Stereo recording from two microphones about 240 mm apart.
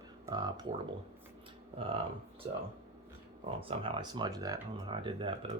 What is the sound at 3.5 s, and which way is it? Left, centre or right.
Speech, right.